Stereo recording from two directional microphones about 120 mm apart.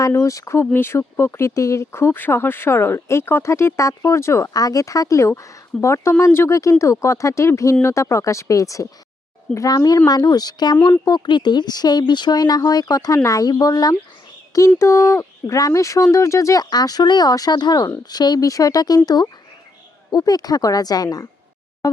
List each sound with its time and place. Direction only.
0.0 s speech: 25° left (ahead or behind)